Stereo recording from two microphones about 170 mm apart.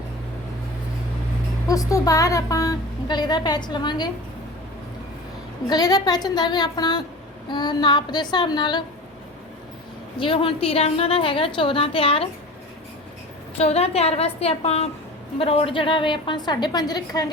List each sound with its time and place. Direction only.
1.6 s a woman's voice: 20° left (ahead or behind)
5.6 s a woman's voice: 25° left (ahead or behind)
10.2 s a woman's voice: 30° left (ahead or behind)
13.6 s a woman's voice: 35° left (ahead or behind)